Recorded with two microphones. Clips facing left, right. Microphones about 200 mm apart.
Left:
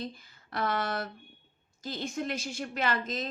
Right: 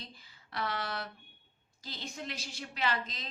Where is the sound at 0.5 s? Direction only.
50° left (ahead or behind).